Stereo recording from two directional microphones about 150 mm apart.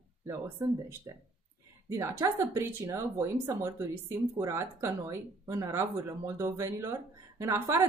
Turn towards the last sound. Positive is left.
turn(degrees=-15)  # may be behind; listen again after turning